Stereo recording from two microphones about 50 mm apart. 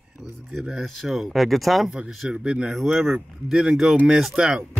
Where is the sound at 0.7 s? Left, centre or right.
Centre.